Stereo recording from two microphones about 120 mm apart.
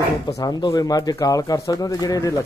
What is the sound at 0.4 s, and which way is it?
Speech, 35° left (ahead or behind).